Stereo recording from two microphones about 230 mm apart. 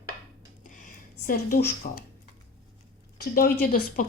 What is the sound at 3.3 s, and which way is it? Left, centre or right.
Speech, left.